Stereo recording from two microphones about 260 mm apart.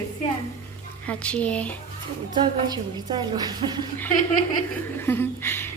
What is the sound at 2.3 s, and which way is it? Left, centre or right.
A woman's voice, centre.